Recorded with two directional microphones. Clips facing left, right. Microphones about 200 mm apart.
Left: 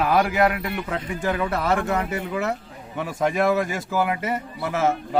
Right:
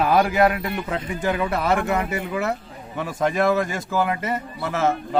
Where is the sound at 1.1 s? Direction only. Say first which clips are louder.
Right 1 dB; 20° right (ahead or behind).